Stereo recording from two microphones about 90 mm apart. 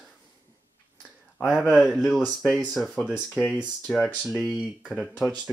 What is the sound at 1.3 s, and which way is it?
Speech, 5° right (ahead or behind).